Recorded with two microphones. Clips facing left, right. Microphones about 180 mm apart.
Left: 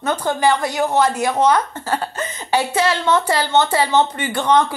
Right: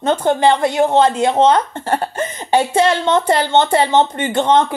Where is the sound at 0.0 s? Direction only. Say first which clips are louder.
Right 4 dB; 25° right (ahead or behind).